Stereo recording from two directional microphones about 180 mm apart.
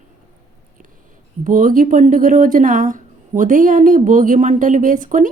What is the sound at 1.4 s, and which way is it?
Speech, 45° right (ahead or behind).